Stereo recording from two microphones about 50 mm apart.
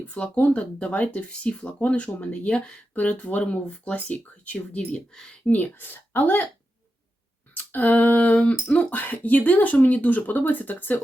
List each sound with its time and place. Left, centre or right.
0.0 s speech: left
2.9 s speech: left
7.5 s a sound: left
8.7 s speech: left